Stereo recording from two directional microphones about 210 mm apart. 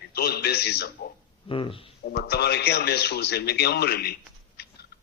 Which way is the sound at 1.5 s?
25° left (ahead or behind).